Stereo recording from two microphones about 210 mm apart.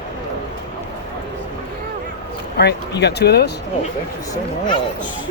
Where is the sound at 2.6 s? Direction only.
50° left (ahead or behind).